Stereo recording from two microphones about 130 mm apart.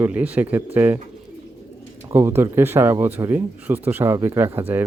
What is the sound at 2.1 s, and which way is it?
Speech, 20° right (ahead or behind).